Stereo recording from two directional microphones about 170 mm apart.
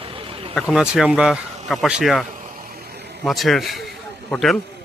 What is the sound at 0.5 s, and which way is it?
Speech, centre (ahead or behind).